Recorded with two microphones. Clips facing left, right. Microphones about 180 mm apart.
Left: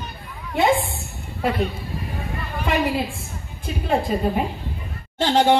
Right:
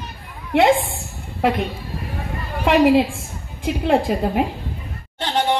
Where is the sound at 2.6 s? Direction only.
80° right.